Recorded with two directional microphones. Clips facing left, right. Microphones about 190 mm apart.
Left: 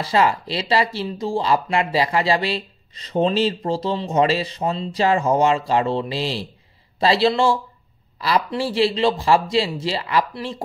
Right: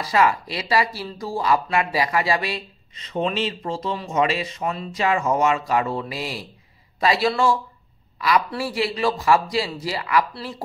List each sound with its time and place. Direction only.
0.0 s speech: 30° left (ahead or behind)